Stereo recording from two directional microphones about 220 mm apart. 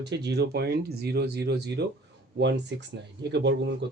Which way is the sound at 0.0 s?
50° right (ahead or behind).